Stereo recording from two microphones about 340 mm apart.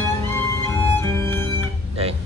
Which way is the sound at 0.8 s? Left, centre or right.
Centre.